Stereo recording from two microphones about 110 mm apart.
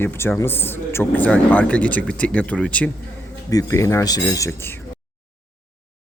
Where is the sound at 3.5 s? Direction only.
30° left (ahead or behind).